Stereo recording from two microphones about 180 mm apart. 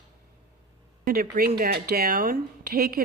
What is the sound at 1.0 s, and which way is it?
Speech, 55° right (ahead or behind).